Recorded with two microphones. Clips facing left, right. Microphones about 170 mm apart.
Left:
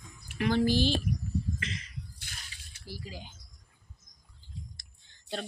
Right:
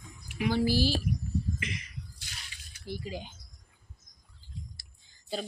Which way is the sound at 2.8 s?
20° right (ahead or behind).